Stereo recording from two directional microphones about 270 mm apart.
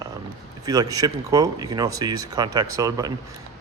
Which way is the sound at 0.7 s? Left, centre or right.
Centre.